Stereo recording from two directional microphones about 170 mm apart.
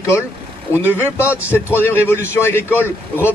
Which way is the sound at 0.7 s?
15° left (ahead or behind).